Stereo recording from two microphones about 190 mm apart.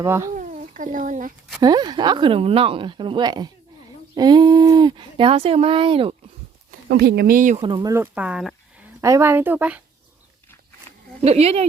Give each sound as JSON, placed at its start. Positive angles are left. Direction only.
{"t": 0.0, "sound": "speech", "side_deg": -15}
{"t": 0.3, "sound": "a sound", "side_deg": -40}
{"t": 1.6, "sound": "speech", "side_deg": -20}
{"t": 6.7, "sound": "speech", "side_deg": -60}
{"t": 7.6, "sound": "speech", "side_deg": -20}
{"t": 9.0, "sound": "speech", "side_deg": -15}
{"t": 11.2, "sound": "speech", "side_deg": -30}